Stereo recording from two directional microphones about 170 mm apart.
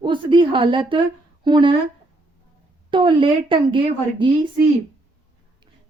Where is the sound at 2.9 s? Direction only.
30° right (ahead or behind).